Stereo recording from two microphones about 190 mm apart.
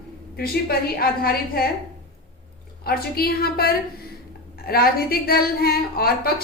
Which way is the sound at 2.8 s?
55° left (ahead or behind).